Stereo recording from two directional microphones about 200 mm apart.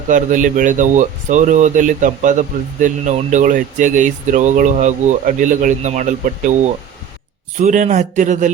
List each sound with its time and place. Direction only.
0.1 s speech: 40° right (ahead or behind)